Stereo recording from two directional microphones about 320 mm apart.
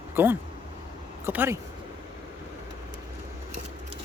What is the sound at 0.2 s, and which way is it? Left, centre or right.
Speech, centre.